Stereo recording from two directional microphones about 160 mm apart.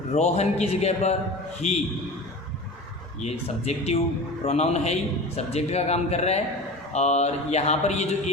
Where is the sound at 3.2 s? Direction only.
40° left (ahead or behind).